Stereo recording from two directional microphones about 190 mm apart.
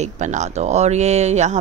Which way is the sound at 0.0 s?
40° right (ahead or behind).